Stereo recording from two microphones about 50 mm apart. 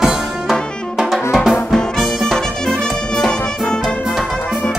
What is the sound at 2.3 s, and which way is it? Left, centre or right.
Music, centre.